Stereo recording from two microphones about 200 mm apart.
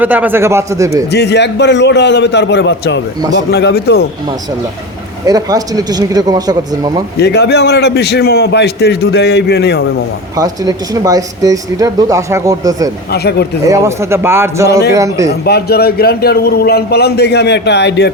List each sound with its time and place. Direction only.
0.0 s speech: 10° right (ahead or behind)
1.1 s a man's voice: 55° left (ahead or behind)
5.2 s speech: 20° right (ahead or behind)
7.2 s a man's voice: 55° left (ahead or behind)
10.3 s speech: 20° right (ahead or behind)
13.1 s a man's voice: 55° left (ahead or behind)
13.7 s speech: 15° right (ahead or behind)
15.3 s a man's voice: 55° left (ahead or behind)